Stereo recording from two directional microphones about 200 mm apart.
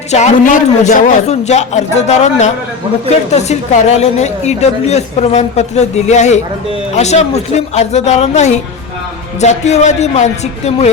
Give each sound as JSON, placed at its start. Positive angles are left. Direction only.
{"t": 0.1, "sound": "a woman's voice", "side_deg": 40}